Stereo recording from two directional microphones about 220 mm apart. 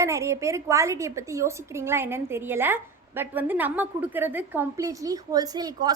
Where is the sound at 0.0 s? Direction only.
15° right (ahead or behind).